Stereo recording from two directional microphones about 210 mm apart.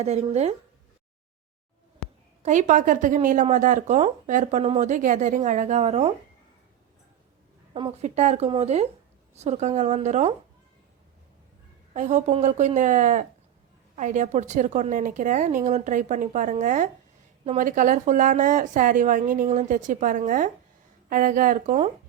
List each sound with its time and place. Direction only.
0.0 s speech: 30° right (ahead or behind)
2.4 s speech: 35° right (ahead or behind)
7.7 s speech: 30° right (ahead or behind)
11.9 s speech: 35° right (ahead or behind)